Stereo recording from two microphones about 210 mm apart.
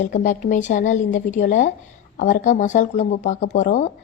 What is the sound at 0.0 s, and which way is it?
A woman's voice, 40° left (ahead or behind).